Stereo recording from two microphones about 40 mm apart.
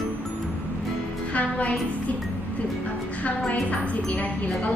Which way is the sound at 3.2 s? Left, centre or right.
Left.